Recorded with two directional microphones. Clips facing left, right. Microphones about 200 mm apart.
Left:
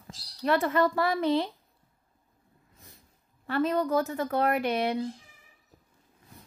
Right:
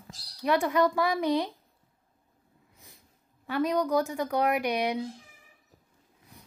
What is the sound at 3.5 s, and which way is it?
Speech, 15° right (ahead or behind).